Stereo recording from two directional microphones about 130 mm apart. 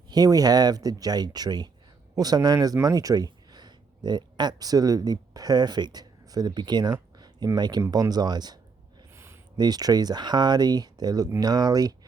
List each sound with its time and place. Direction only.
0.1 s speech: 30° right (ahead or behind)
9.1 s a sound: 20° right (ahead or behind)
9.6 s speech: 30° right (ahead or behind)